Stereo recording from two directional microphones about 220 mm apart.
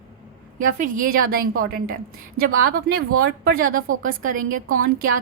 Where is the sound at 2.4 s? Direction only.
45° right (ahead or behind).